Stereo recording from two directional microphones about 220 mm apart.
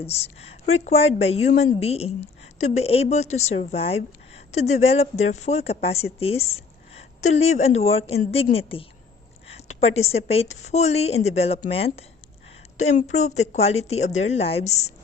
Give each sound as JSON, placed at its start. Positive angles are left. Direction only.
{"t": 0.0, "sound": "a woman's voice", "side_deg": 30}